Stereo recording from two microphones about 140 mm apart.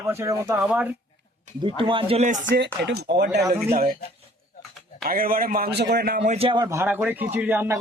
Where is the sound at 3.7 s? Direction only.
90° right.